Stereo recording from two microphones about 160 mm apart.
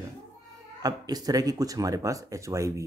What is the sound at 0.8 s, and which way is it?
Speech, 25° right (ahead or behind).